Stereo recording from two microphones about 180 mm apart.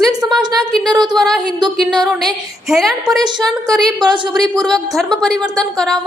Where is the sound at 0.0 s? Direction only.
20° right (ahead or behind).